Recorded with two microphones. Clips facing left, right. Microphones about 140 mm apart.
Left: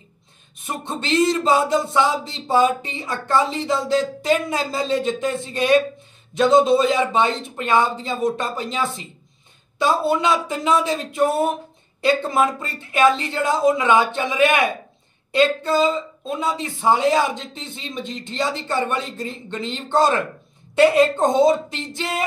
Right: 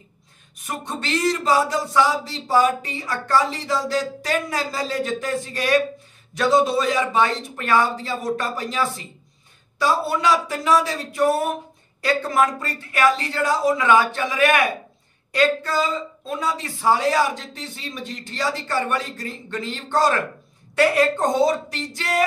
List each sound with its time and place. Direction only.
0.6 s speech: 25° left (ahead or behind)